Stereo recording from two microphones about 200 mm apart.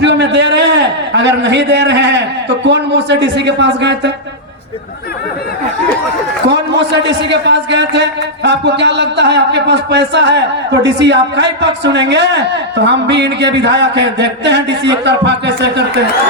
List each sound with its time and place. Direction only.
0.0 s a sound: 60° right (ahead or behind)
2.6 s speech: 60° right (ahead or behind)
6.9 s speech: 60° right (ahead or behind)